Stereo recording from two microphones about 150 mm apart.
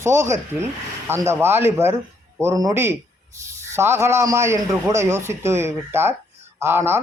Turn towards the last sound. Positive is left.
turn(degrees=-15)  # may be behind; listen again after turning